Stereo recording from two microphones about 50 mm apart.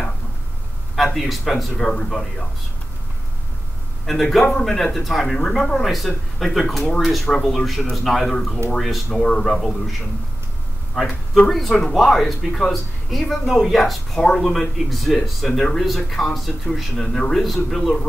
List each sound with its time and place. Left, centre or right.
0.9 s a man's voice: centre
4.0 s a man's voice: centre
7.2 s a man's voice: centre
9.5 s speech: centre
10.9 s a man's voice: centre